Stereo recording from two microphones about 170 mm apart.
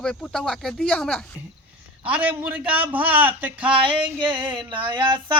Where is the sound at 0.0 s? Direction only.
5° left (ahead or behind).